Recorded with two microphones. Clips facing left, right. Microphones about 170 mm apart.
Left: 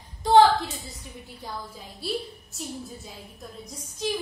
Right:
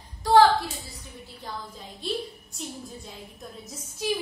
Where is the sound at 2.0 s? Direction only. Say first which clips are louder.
Even; centre (ahead or behind).